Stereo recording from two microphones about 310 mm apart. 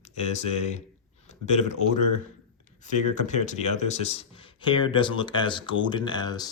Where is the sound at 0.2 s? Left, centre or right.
Left.